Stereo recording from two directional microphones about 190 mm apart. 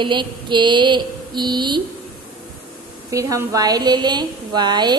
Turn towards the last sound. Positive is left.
turn(degrees=-20)  # may be behind; listen again after turning